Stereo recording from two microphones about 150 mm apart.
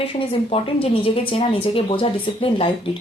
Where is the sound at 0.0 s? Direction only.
40° left (ahead or behind).